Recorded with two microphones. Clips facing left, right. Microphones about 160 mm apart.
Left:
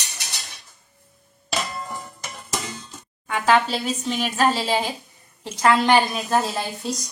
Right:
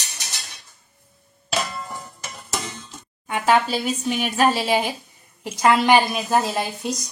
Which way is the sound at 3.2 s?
15° right (ahead or behind).